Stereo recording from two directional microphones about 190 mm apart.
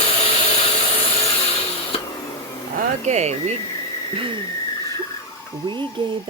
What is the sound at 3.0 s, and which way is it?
Speech, 35° right (ahead or behind).